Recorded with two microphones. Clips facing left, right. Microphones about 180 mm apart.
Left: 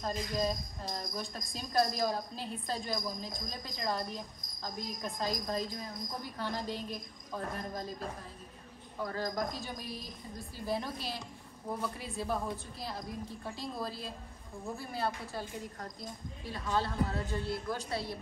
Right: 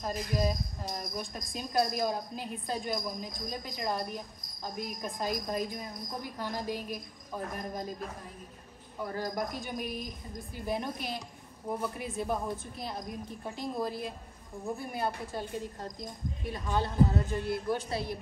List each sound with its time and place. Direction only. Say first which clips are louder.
0.0 s speech: right 2 dB; 10° right (ahead or behind)
9.0 s speech: right 1 dB; 10° right (ahead or behind)